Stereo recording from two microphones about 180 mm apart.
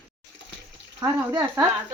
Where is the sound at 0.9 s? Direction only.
15° right (ahead or behind).